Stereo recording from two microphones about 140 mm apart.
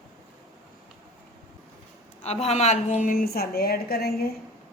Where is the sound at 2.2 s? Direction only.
50° left (ahead or behind); by 4.1 s 90° left.